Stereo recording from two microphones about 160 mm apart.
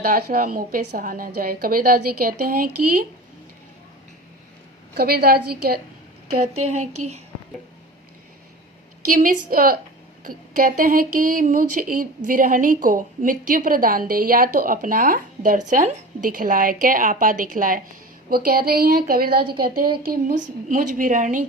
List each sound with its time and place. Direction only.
0.0 s speech: 65° right (ahead or behind)
4.9 s speech: 70° right (ahead or behind)
6.4 s speech: 45° right (ahead or behind)
9.1 s speech: 60° right (ahead or behind)
18.3 s speech: 70° right (ahead or behind)